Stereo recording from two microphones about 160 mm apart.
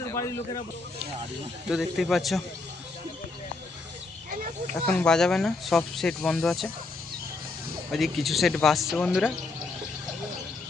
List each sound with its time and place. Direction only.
0.1 s a man's voice: 20° left (ahead or behind)
1.7 s speech: centre (ahead or behind)
4.9 s speech: 5° left (ahead or behind)
7.9 s speech: centre (ahead or behind)